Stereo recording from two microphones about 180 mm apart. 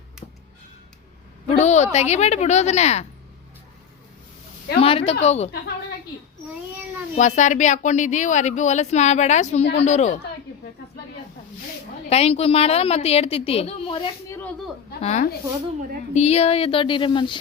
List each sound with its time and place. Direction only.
1.5 s speech: 40° left (ahead or behind)
4.8 s speech: 30° left (ahead or behind)
7.2 s speech: 40° left (ahead or behind)
12.0 s speech: 35° left (ahead or behind)
14.3 s a sound: 15° left (ahead or behind)
15.0 s speech: 40° left (ahead or behind)